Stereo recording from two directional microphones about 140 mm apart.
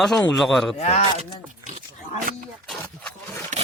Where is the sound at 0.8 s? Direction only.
50° left (ahead or behind).